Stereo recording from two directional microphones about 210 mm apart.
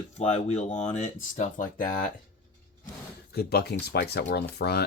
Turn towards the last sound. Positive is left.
turn(degrees=50)  # may be behind; listen again after turning